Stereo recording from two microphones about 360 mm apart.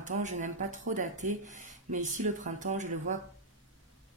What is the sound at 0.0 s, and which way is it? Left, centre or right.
Speech, centre.